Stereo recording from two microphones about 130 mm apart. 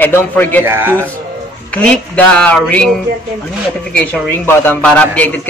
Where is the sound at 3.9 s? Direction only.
15° left (ahead or behind).